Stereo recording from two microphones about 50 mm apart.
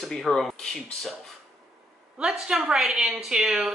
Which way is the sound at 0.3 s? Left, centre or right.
Centre.